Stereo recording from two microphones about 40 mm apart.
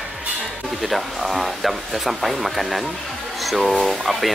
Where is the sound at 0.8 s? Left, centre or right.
Centre.